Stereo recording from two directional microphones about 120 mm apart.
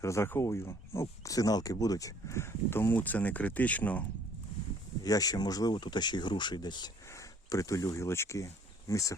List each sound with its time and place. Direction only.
0.0 s speech: 20° left (ahead or behind)
5.0 s speech: 30° left (ahead or behind)